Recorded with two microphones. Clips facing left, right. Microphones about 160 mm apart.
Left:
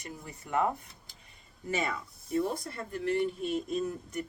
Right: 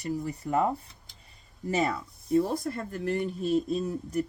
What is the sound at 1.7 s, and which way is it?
Speech, 35° right (ahead or behind).